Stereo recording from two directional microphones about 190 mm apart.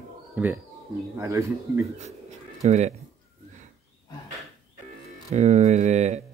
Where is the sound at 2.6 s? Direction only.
35° right (ahead or behind).